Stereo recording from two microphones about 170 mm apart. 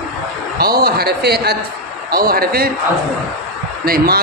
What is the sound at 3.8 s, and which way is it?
Speech, 60° right (ahead or behind).